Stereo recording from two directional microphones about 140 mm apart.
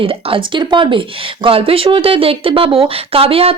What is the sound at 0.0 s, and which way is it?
Speech, 40° right (ahead or behind).